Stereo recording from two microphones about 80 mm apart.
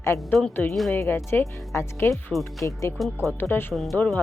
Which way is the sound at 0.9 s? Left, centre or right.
Left.